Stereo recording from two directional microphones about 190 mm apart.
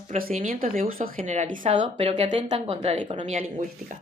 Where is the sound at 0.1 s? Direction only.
45° right (ahead or behind); by 3.2 s 30° right (ahead or behind).